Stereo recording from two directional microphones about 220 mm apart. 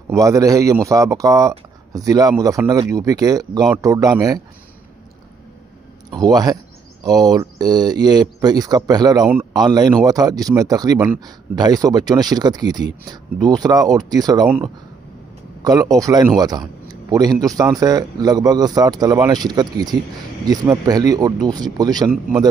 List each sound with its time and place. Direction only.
0.1 s a man's voice: 15° right (ahead or behind)
6.1 s a man's voice: 20° right (ahead or behind)